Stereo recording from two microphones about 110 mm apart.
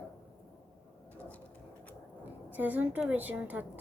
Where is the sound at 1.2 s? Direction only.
15° left (ahead or behind).